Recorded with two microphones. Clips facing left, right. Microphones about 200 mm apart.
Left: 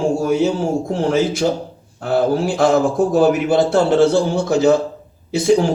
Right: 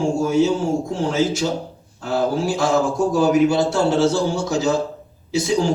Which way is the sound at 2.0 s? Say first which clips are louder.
Left 4 dB; 60° left (ahead or behind).